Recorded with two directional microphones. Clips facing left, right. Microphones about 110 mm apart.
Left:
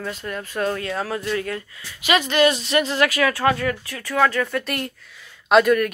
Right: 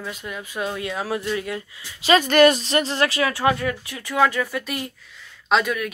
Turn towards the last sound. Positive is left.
turn(degrees=0)  # may be behind; listen again after turning